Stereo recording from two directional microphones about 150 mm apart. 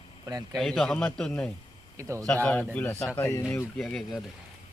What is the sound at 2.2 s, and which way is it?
Speech, 10° left (ahead or behind).